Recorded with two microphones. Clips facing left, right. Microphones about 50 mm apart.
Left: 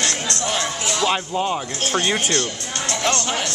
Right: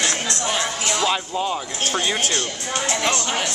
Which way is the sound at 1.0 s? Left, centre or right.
Centre.